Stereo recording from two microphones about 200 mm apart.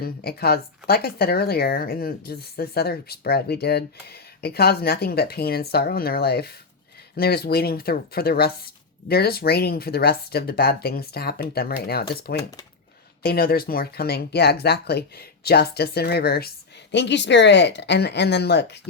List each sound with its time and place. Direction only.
0.0 s speech: 50° left (ahead or behind)
12.4 s speech: 15° left (ahead or behind)
13.2 s speech: 50° left (ahead or behind)
16.9 s speech: 60° left (ahead or behind)